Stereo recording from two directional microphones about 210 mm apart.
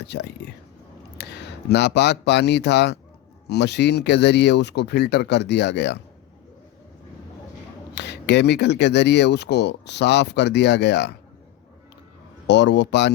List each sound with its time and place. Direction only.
0.0 s speech: 55° left (ahead or behind)
7.9 s speech: 55° left (ahead or behind)
12.5 s a man's voice: 55° left (ahead or behind)